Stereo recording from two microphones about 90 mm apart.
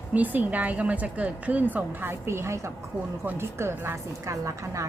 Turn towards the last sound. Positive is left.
turn(degrees=-35)  # may be behind; listen again after turning